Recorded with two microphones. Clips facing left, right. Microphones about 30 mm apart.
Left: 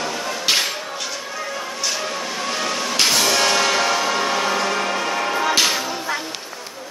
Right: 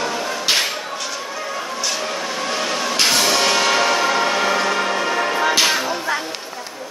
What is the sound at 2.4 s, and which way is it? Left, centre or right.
Music, centre.